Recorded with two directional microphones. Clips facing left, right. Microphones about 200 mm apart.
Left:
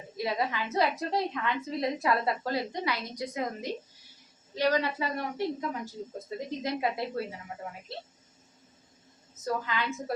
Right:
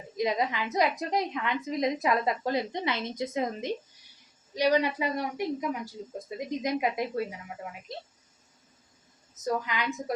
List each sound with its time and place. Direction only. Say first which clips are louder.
0.2 s a woman's voice: right 3 dB; 20° right (ahead or behind)
9.3 s speech: right 2 dB; 20° right (ahead or behind)